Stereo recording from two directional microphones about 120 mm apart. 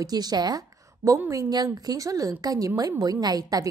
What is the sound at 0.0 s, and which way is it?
A woman's voice, 35° right (ahead or behind).